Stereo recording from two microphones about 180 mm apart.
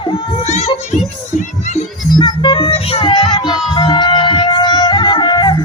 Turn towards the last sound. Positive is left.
turn(degrees=25)  # may be behind; listen again after turning